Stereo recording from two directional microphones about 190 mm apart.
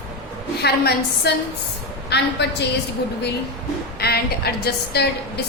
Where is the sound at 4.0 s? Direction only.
55° left (ahead or behind).